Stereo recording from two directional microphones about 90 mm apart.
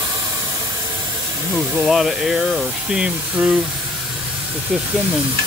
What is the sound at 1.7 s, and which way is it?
Speech, centre (ahead or behind).